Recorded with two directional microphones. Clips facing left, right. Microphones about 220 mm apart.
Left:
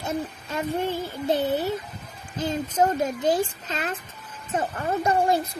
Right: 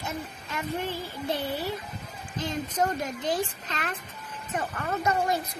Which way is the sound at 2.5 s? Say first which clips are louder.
Left 5 dB; 25° left (ahead or behind).